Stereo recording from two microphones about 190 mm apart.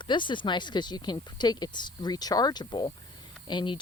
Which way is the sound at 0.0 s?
25° left (ahead or behind).